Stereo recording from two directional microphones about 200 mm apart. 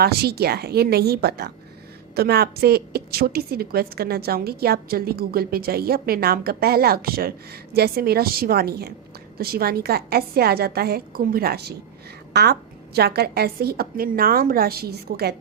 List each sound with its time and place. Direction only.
0.0 s a woman's voice: 50° right (ahead or behind)